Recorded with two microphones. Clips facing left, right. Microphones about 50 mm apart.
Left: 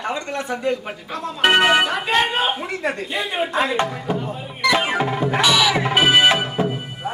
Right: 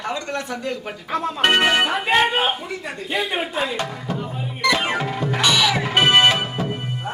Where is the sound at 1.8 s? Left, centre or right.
Centre.